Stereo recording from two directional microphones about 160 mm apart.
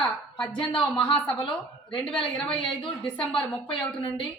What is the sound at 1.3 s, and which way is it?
Speech, 30° left (ahead or behind).